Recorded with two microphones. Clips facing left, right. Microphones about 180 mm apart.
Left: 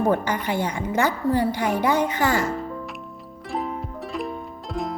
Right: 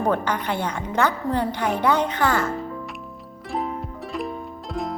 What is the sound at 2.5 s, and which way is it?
Music, centre (ahead or behind).